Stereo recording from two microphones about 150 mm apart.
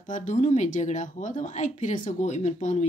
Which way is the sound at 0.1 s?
55° left (ahead or behind).